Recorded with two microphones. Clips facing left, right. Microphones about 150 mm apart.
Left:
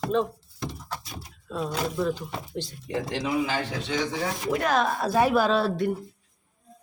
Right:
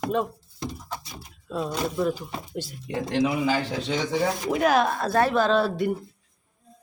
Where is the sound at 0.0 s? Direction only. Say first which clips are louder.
Left 1 dB; 10° right (ahead or behind).